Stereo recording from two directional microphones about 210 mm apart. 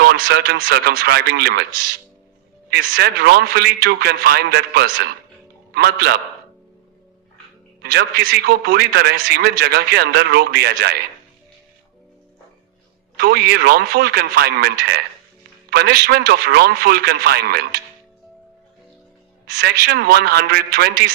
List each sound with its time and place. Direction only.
0.0 s a man's voice: 50° right (ahead or behind)
2.6 s a man's voice: 50° right (ahead or behind)
7.8 s a man's voice: 50° right (ahead or behind)
13.1 s a man's voice: 50° right (ahead or behind)
19.9 s a man's voice: 50° right (ahead or behind)